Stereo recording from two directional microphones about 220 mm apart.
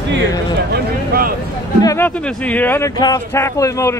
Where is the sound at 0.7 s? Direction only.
45° right (ahead or behind).